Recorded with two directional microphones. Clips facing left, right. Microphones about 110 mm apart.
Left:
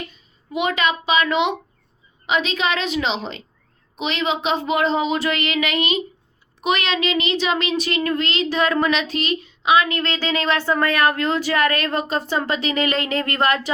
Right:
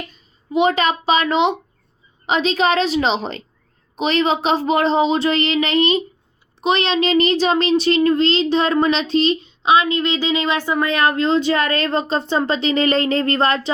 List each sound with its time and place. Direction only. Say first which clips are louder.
0.5 s a woman's voice: right 5 dB; 30° right (ahead or behind)